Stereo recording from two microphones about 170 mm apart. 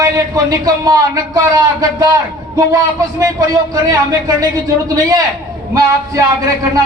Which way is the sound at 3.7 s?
20° right (ahead or behind).